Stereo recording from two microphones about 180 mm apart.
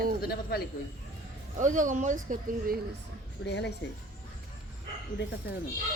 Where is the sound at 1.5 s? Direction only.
45° right (ahead or behind).